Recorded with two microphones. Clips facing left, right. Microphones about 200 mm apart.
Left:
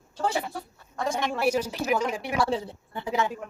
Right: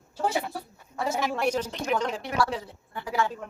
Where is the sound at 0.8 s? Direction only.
5° right (ahead or behind).